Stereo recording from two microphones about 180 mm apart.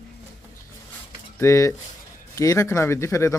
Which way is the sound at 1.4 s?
15° left (ahead or behind).